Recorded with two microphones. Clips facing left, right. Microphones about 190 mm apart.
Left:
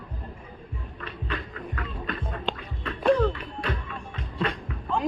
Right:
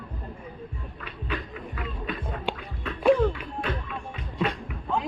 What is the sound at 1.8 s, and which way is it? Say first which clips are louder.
Music: right 1 dB; 10° right (ahead or behind).